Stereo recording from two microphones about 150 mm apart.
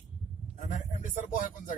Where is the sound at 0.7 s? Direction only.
55° left (ahead or behind).